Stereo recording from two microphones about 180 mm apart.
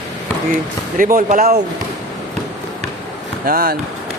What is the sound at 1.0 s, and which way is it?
Speech, 50° right (ahead or behind).